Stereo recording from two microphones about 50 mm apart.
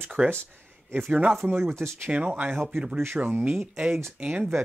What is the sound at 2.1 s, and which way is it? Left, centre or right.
Speech, right.